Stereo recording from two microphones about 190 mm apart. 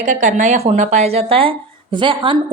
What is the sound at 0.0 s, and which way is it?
A woman's voice, 40° right (ahead or behind).